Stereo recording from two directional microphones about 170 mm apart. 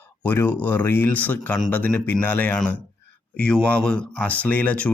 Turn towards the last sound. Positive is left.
turn(degrees=10)  # may be behind; listen again after turning